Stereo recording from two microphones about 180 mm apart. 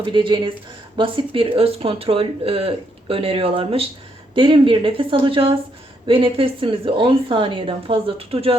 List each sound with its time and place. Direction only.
0.0 s a woman's voice: 25° right (ahead or behind)